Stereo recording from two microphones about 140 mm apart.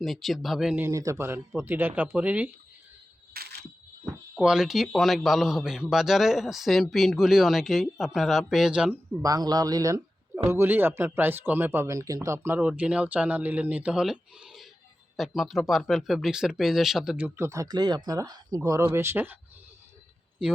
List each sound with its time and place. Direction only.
0.0 s a man's voice: centre (ahead or behind)
0.8 s speech: 20° right (ahead or behind)
3.3 s camera: 90° right
4.4 s a man's voice: 5° right (ahead or behind)
9.2 s speech: 25° right (ahead or behind)